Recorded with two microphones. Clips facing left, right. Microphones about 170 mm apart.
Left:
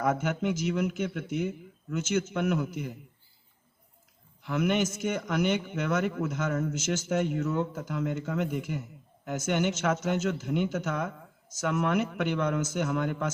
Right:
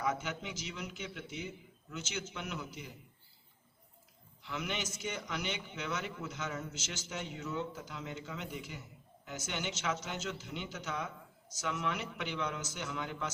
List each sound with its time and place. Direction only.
0.0 s a man's voice: 50° left (ahead or behind)
4.4 s a man's voice: 50° left (ahead or behind)